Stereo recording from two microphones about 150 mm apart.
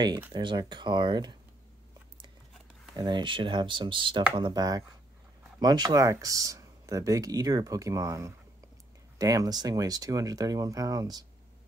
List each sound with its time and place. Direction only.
0.3 s speech: 30° right (ahead or behind)
3.0 s speech: 30° right (ahead or behind)